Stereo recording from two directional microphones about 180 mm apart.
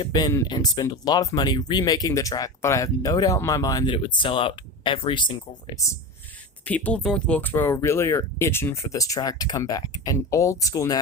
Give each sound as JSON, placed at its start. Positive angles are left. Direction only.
{"t": 0.0, "sound": "speech", "side_deg": 20}
{"t": 6.7, "sound": "speech", "side_deg": 10}